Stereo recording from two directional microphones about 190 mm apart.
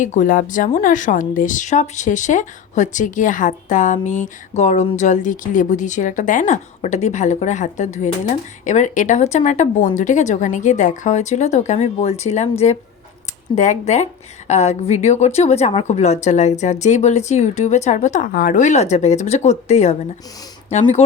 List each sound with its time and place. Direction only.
0.0 s speech: 40° left (ahead or behind)